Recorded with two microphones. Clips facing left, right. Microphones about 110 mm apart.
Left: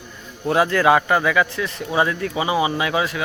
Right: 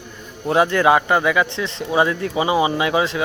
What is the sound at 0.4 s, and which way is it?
Speech, 25° right (ahead or behind).